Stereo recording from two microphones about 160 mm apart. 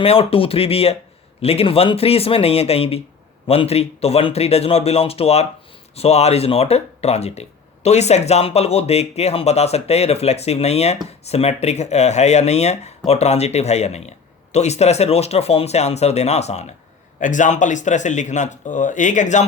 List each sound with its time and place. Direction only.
0.0 s speech: 35° left (ahead or behind)